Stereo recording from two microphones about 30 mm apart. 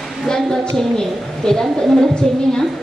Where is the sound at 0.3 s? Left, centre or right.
Left.